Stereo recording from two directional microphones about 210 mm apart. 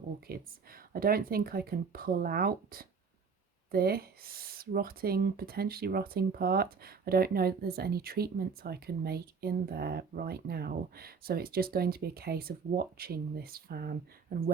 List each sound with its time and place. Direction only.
0.3 s speech: 45° right (ahead or behind)